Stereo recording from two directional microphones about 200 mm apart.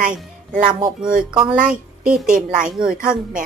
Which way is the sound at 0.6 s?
25° right (ahead or behind).